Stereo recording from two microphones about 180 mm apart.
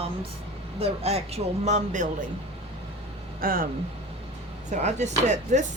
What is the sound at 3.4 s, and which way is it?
Speech, 55° right (ahead or behind).